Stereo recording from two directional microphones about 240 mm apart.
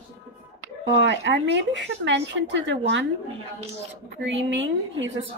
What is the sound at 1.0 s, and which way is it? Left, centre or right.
Speech, right.